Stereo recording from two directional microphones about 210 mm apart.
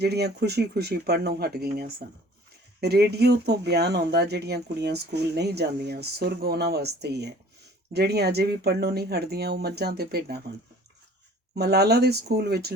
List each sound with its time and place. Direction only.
0.0 s speech: 50° right (ahead or behind)
11.5 s speech: 50° right (ahead or behind)